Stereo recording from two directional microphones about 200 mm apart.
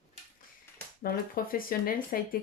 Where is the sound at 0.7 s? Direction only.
10° left (ahead or behind).